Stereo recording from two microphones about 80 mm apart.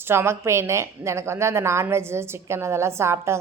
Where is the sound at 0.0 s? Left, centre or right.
Right.